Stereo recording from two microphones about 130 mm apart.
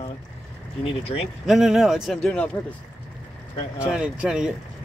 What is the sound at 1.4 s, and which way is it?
A man's voice, centre (ahead or behind).